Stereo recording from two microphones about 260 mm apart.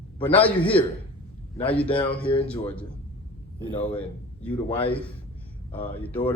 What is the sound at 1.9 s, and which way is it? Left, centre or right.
Speech, centre.